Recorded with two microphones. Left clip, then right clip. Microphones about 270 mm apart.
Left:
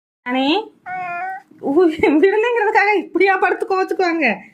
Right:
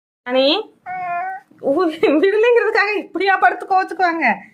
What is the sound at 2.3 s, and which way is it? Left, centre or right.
Speech, right.